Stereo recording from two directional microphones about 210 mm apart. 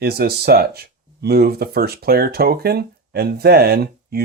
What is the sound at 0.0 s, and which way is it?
Speech, 50° right (ahead or behind).